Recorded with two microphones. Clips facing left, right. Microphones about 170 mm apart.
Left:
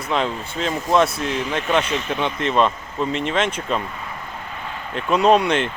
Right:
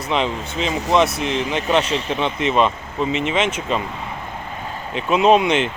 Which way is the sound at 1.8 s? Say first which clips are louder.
Right 2 dB; 30° right (ahead or behind).